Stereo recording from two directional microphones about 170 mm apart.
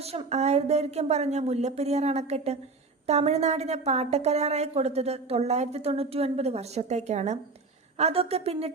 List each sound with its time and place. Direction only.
0.0 s a woman's voice: 35° right (ahead or behind)